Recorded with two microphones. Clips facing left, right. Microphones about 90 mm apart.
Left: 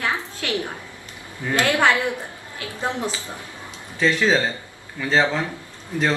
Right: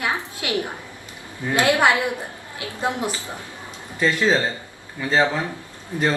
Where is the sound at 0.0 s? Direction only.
15° right (ahead or behind).